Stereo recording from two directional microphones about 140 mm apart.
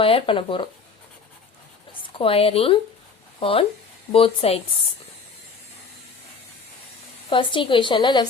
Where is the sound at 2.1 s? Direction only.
40° left (ahead or behind).